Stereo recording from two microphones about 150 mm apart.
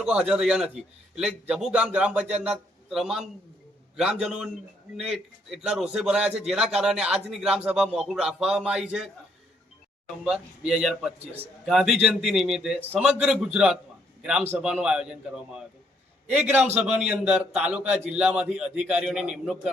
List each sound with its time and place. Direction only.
0.0 s a man's voice: 5° right (ahead or behind)
10.7 s a man's voice: 5° right (ahead or behind)
16.7 s a man's voice: 5° right (ahead or behind)